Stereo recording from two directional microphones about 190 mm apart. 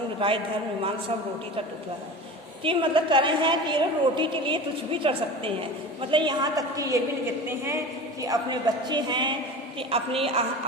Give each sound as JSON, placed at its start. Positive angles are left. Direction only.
{"t": 0.2, "sound": "a woman's voice", "side_deg": -25}
{"t": 2.6, "sound": "a woman's voice", "side_deg": -25}